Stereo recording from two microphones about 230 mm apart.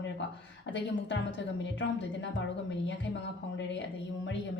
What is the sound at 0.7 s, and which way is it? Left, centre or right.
A woman's voice, left.